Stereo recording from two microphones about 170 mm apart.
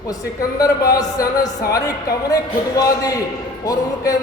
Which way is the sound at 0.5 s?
20° left (ahead or behind).